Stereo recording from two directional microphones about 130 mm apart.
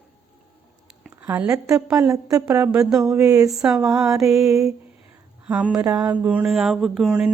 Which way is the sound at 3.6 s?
5° right (ahead or behind).